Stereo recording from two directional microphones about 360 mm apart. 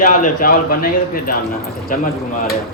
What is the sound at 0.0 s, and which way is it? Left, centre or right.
Speech, left.